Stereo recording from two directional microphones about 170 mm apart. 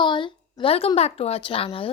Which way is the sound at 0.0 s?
30° left (ahead or behind).